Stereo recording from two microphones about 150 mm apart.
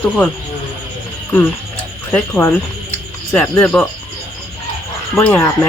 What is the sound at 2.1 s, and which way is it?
Speech, 15° left (ahead or behind).